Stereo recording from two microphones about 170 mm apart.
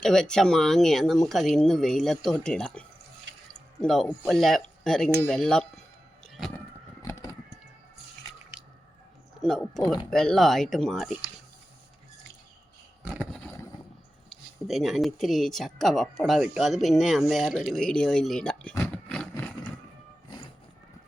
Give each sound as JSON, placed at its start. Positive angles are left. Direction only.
{"t": 0.0, "sound": "speech", "side_deg": 5}
{"t": 3.5, "sound": "drip", "side_deg": 5}
{"t": 4.3, "sound": "speech", "side_deg": 0}
{"t": 6.2, "sound": "a sound", "side_deg": 0}
{"t": 7.0, "sound": "fowl", "side_deg": 20}
{"t": 9.4, "sound": "speech", "side_deg": 0}
{"t": 13.0, "sound": "a sound", "side_deg": -5}
{"t": 14.3, "sound": "speech", "side_deg": 0}
{"t": 18.7, "sound": "a sound", "side_deg": 10}